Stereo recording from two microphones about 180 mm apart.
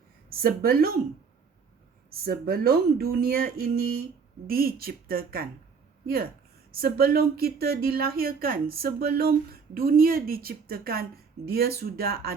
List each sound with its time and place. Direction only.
0.3 s speech: 55° right (ahead or behind)
2.0 s speech: 55° right (ahead or behind)
6.7 s speech: 55° right (ahead or behind)